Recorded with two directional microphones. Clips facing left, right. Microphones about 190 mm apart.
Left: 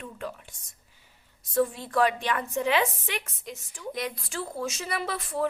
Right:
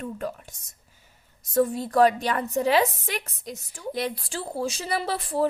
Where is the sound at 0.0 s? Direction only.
40° right (ahead or behind).